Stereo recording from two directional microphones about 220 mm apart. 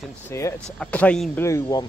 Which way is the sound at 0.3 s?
15° left (ahead or behind).